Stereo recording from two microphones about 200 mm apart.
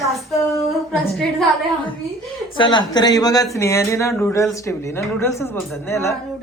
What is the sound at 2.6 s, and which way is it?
A woman's voice, 25° left (ahead or behind).